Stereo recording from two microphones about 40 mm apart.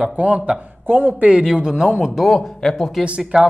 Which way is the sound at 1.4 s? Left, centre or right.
Centre.